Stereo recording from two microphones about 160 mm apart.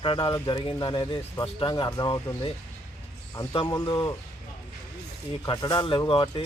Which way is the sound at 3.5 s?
25° left (ahead or behind).